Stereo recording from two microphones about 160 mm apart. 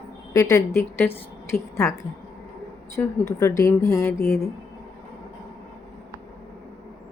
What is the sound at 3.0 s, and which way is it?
A woman's voice, 10° left (ahead or behind).